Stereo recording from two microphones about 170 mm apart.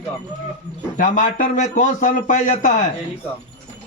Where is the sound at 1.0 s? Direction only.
50° left (ahead or behind).